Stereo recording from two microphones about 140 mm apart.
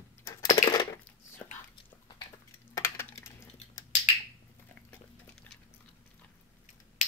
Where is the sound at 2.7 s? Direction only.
20° left (ahead or behind).